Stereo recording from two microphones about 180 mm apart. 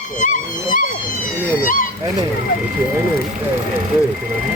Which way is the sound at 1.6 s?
50° left (ahead or behind).